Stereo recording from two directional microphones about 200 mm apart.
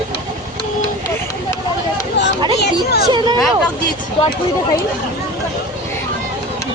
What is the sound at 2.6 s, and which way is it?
Speech, 55° left (ahead or behind).